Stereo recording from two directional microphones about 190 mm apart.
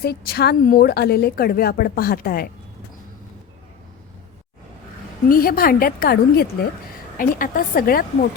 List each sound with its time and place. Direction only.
0.0 s speech: 55° left (ahead or behind)
5.3 s speech: 50° left (ahead or behind)